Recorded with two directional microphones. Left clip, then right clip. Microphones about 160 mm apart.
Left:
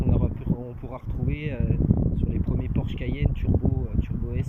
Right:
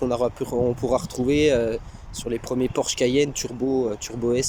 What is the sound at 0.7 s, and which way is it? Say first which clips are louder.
Speech: right 16 dB; 50° right (ahead or behind).